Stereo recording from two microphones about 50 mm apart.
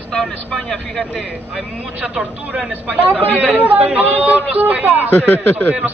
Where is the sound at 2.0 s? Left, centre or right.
Right.